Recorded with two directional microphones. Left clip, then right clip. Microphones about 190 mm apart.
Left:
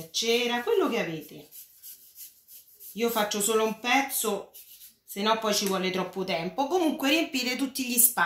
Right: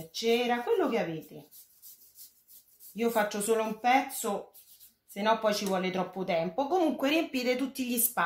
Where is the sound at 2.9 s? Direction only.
45° right (ahead or behind).